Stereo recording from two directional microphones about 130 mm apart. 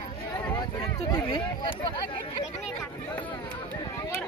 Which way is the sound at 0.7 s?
35° left (ahead or behind).